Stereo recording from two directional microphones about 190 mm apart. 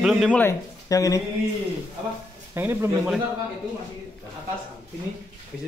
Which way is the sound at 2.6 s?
10° right (ahead or behind).